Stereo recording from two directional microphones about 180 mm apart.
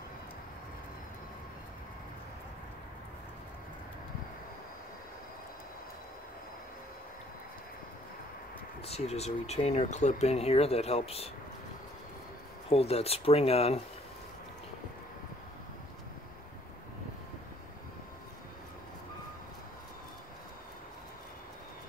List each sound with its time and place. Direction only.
8.8 s speech: 35° left (ahead or behind)
12.6 s speech: 35° left (ahead or behind)